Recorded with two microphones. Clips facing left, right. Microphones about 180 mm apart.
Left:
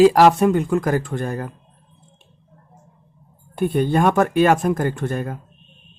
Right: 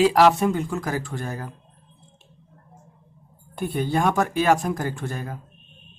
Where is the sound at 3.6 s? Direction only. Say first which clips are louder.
Left 5 dB; 55° left (ahead or behind).